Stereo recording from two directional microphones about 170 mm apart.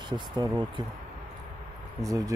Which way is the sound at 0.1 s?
25° right (ahead or behind).